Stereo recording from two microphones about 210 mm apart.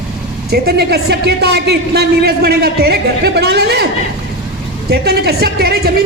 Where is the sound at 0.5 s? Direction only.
50° right (ahead or behind).